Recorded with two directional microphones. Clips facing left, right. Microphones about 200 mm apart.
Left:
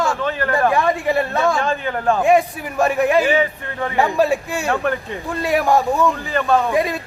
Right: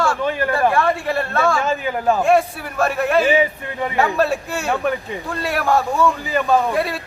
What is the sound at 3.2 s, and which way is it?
Speech, 15° right (ahead or behind).